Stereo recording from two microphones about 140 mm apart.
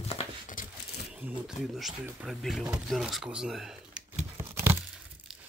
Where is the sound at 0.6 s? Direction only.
75° left (ahead or behind).